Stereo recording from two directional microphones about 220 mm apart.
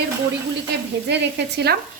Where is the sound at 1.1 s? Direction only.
50° right (ahead or behind).